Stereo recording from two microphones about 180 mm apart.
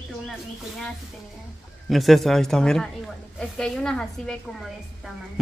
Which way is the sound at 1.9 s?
Centre (ahead or behind).